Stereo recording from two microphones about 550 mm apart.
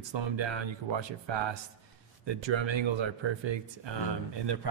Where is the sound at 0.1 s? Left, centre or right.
Right.